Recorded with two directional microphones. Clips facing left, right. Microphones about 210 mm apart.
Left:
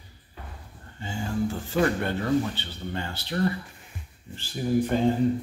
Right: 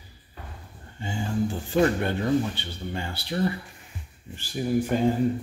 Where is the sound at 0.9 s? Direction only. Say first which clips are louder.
Right 1 dB; 15° right (ahead or behind).